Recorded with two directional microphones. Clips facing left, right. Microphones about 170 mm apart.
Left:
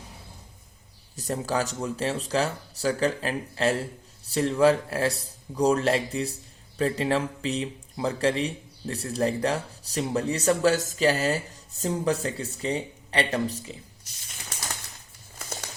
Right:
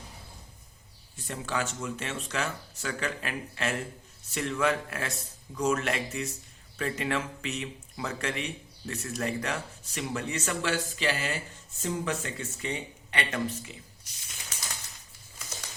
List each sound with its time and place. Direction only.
1.1 s speech: 40° left (ahead or behind)